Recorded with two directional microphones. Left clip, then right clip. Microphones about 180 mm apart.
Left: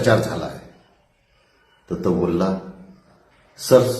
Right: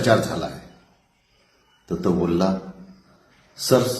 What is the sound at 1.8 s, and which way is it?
Speech, centre (ahead or behind).